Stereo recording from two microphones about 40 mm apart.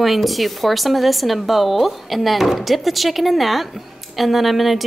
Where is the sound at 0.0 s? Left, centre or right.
Centre.